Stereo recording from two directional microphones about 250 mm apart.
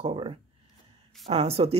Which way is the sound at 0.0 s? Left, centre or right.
Right.